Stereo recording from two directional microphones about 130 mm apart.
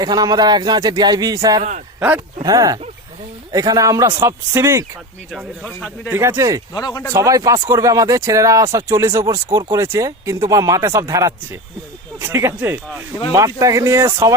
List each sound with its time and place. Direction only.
0.0 s speech: 30° right (ahead or behind)
2.0 s speech: 15° right (ahead or behind)
2.4 s speech: 30° right (ahead or behind)
5.3 s a man's voice: centre (ahead or behind)
6.1 s speech: 20° right (ahead or behind)
6.7 s speech: 25° left (ahead or behind)
7.1 s speech: 25° right (ahead or behind)